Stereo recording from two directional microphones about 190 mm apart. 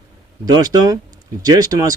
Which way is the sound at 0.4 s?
20° right (ahead or behind).